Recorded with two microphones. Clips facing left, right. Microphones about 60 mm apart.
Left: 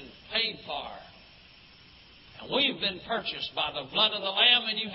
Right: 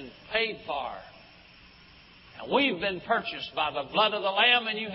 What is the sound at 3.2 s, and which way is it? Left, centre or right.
A man's voice, right.